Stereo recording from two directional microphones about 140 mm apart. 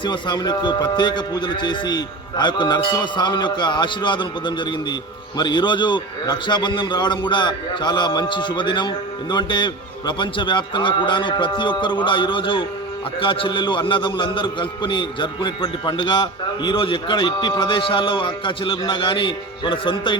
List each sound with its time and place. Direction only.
0.0 s a man's voice: 35° left (ahead or behind)